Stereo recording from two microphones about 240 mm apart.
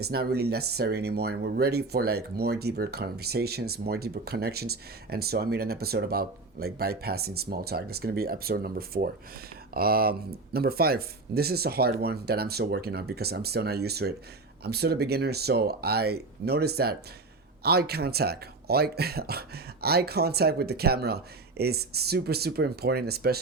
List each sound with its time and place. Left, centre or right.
0.1 s speech: right